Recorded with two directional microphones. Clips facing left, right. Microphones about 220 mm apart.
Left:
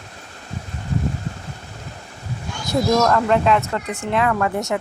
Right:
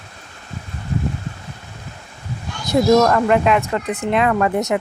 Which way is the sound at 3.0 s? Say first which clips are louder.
Right 2 dB; 10° right (ahead or behind).